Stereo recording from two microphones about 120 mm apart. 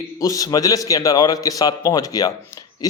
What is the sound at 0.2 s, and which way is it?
Speech, 30° left (ahead or behind).